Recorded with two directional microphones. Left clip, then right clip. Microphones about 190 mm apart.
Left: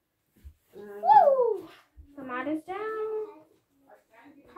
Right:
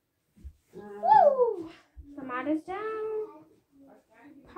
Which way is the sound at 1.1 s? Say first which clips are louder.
Left 1 dB; 25° left (ahead or behind).